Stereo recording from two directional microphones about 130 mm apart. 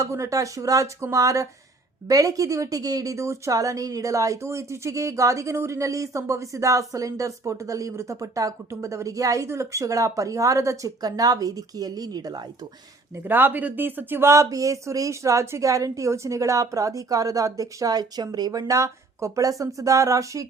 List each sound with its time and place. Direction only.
0.0 s a woman's voice: 25° right (ahead or behind)
13.1 s a woman's voice: 15° right (ahead or behind)